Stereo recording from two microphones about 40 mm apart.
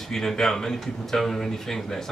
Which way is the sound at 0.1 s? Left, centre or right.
Centre.